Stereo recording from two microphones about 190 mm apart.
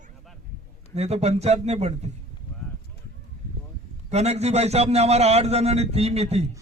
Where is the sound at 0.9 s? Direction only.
35° right (ahead or behind).